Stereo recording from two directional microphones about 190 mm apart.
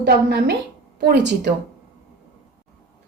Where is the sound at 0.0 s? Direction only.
60° right (ahead or behind).